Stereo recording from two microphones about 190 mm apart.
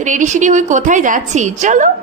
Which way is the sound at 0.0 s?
40° right (ahead or behind).